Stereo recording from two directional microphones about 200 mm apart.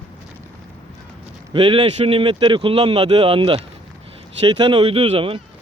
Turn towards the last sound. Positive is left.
turn(degrees=-30)  # may be behind; listen again after turning